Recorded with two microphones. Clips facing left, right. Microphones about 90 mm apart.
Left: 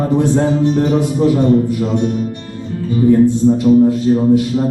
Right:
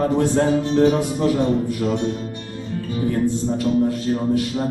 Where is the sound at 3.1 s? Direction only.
15° left (ahead or behind).